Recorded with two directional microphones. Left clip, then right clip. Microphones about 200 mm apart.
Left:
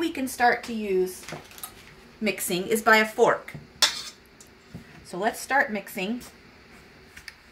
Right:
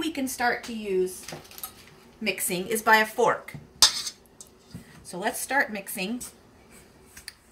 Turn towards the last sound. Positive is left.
turn(degrees=20)  # may be behind; listen again after turning